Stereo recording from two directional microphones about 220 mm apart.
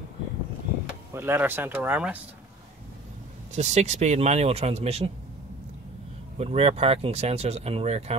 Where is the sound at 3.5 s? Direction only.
30° right (ahead or behind).